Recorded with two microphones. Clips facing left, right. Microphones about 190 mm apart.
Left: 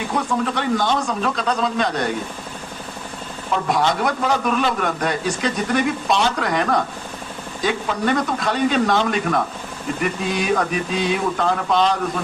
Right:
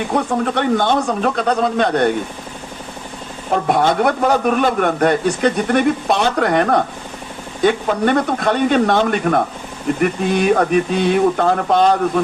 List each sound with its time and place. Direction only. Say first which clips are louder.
0.1 s a man's voice: right 3 dB; 60° right (ahead or behind)
3.5 s a man's voice: right 4 dB; 55° right (ahead or behind)